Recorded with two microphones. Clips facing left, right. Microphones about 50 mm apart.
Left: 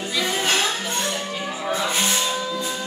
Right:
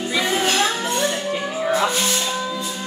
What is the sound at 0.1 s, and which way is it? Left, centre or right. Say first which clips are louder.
Music: right 2 dB; right.